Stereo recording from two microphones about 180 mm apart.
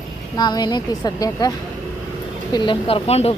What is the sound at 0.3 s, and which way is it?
Speech, 25° left (ahead or behind).